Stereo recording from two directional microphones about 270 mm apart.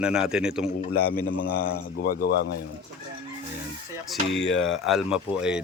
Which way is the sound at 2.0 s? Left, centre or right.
Left.